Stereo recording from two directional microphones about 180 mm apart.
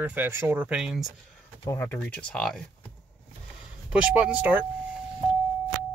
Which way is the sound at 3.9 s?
5° right (ahead or behind).